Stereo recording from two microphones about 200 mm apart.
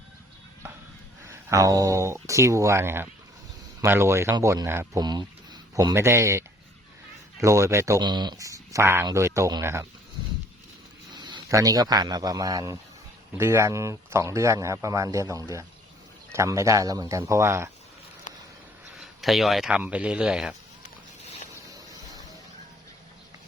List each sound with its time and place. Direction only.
1.3 s mantra: 15° right (ahead or behind)
2.2 s speech: 15° right (ahead or behind)
7.4 s speech: 15° right (ahead or behind)
11.1 s a man's voice: 20° right (ahead or behind)
18.9 s speech: centre (ahead or behind)